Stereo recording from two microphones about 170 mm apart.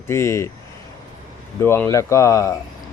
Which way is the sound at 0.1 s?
15° left (ahead or behind).